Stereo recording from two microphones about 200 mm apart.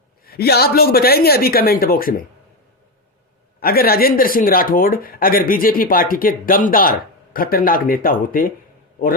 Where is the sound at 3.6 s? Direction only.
50° left (ahead or behind).